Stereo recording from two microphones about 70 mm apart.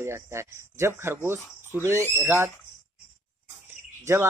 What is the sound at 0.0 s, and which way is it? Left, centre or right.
Speech, right.